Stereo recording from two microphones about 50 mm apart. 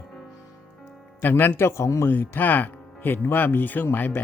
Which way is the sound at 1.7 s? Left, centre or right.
Left.